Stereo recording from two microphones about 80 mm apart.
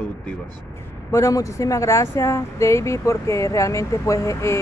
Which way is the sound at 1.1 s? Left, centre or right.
Left.